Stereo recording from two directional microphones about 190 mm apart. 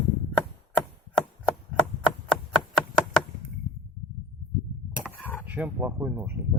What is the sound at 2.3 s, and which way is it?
Knock, 5° left (ahead or behind).